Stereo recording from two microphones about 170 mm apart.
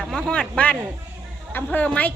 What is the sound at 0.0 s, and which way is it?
A woman's voice, centre (ahead or behind).